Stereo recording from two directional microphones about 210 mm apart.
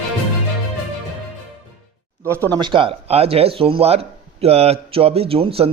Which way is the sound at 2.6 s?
25° right (ahead or behind).